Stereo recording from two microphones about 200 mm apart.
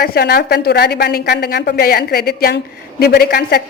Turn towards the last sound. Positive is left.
turn(degrees=50)  # may be behind; listen again after turning